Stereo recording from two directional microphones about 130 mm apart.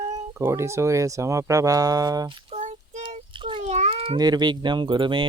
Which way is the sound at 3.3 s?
40° right (ahead or behind).